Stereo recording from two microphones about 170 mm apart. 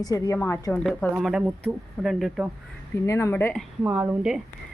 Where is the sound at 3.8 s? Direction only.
10° right (ahead or behind).